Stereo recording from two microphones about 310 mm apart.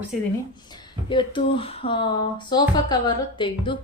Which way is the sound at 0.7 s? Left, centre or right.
Centre.